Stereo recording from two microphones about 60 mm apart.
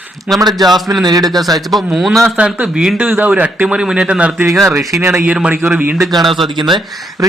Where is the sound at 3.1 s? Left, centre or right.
Right.